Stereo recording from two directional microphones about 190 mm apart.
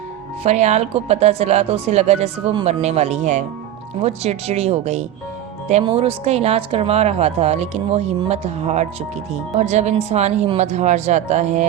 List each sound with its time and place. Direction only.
0.4 s speech: 35° right (ahead or behind)